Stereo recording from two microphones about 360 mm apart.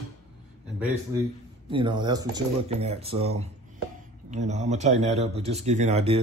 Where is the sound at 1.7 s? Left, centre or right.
Centre.